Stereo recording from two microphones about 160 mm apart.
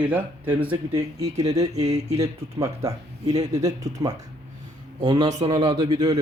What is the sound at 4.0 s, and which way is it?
Speech, 20° right (ahead or behind).